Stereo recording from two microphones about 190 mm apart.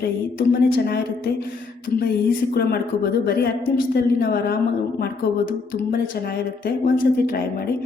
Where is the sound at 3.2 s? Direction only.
55° left (ahead or behind).